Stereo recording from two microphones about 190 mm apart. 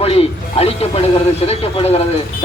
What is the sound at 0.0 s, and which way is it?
A man's voice, 30° left (ahead or behind).